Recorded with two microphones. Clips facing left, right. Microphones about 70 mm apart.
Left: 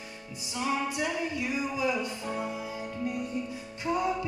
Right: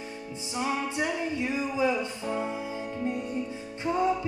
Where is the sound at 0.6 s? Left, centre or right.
Right.